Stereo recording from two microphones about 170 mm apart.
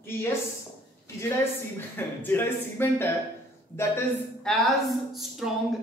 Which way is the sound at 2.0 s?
10° left (ahead or behind).